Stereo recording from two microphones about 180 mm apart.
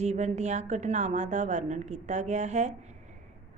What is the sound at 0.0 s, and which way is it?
A woman's voice, 40° right (ahead or behind).